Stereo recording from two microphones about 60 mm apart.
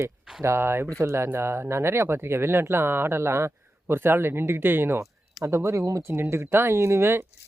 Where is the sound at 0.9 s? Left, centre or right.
Right.